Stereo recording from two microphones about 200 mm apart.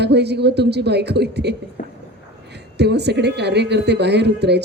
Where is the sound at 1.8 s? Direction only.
40° left (ahead or behind).